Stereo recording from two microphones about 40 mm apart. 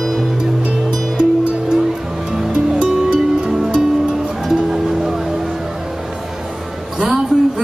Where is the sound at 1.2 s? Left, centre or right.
Centre.